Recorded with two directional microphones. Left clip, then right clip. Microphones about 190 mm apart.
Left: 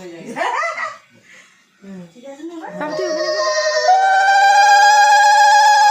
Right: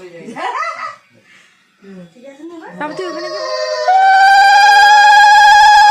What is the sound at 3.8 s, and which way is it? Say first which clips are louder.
Telephone bell ringing: right 6 dB; centre (ahead or behind).